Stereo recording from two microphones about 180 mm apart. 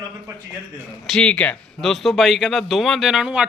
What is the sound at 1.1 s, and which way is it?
Speech, 5° left (ahead or behind).